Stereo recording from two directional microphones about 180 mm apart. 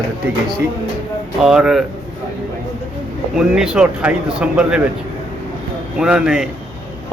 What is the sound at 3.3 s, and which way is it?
Speech, 5° right (ahead or behind).